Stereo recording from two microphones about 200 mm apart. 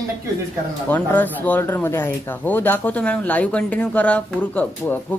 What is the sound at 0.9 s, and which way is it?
Speech, 10° left (ahead or behind).